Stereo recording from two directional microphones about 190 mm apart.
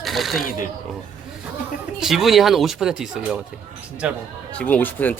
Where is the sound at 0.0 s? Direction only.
Centre (ahead or behind).